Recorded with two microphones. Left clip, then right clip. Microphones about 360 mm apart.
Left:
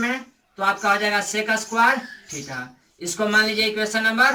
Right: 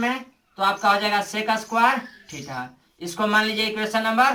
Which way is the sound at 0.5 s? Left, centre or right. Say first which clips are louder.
Even; centre.